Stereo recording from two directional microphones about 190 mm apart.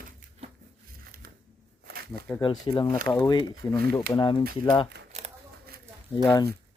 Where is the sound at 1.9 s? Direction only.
55° right (ahead or behind).